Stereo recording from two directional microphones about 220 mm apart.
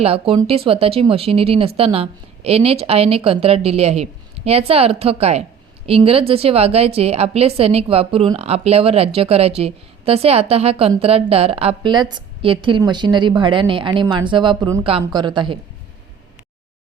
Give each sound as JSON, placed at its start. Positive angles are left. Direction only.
{"t": 0.0, "sound": "speech", "side_deg": -25}